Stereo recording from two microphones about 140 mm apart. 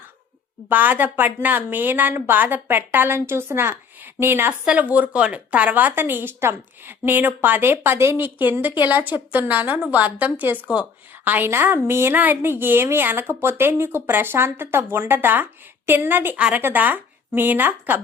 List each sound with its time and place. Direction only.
0.7 s a woman's voice: 10° right (ahead or behind)